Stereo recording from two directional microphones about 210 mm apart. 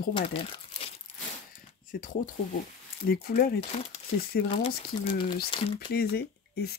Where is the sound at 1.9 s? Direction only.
40° left (ahead or behind).